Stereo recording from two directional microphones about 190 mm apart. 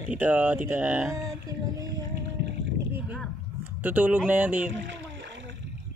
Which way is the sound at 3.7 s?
10° right (ahead or behind).